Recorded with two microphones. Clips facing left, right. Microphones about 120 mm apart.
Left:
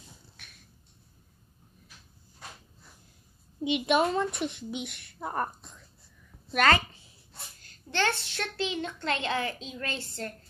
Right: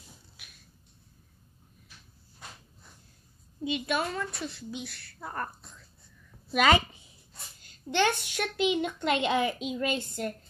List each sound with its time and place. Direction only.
0.4 s a sound: 10° right (ahead or behind)
3.6 s speech: 20° left (ahead or behind)
6.5 s a woman's voice: 10° right (ahead or behind)